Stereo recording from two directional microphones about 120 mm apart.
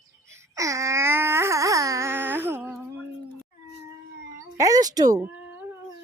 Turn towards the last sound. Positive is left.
turn(degrees=-15)  # may be behind; listen again after turning